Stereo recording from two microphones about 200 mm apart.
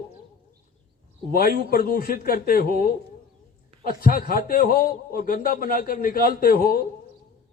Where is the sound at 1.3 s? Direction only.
50° left (ahead or behind).